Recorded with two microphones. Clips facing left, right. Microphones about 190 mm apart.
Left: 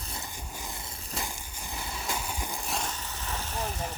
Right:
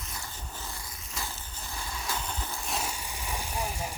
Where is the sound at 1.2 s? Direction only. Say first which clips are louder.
Left 1 dB; 15° left (ahead or behind).